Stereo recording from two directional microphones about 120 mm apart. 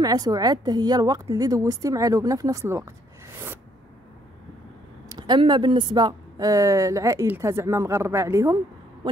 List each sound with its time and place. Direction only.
0.0 s a woman's voice: 30° right (ahead or behind)
5.1 s a woman's voice: 35° right (ahead or behind)